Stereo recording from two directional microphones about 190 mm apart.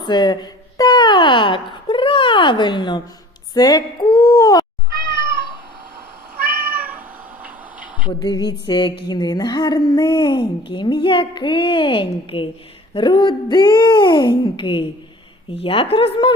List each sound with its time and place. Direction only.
0.0 s a woman's voice: 20° left (ahead or behind)
6.7 s cat: 10° right (ahead or behind)
7.4 s tick-tock: 10° right (ahead or behind)
8.0 s a woman's voice: 20° left (ahead or behind)